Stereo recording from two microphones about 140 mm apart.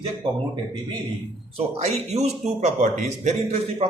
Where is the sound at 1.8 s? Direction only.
50° right (ahead or behind).